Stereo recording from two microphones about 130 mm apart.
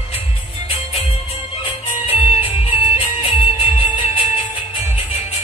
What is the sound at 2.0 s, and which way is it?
Music, 45° left (ahead or behind).